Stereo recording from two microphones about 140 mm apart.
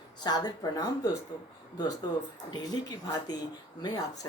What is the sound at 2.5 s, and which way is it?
Speech, 30° left (ahead or behind).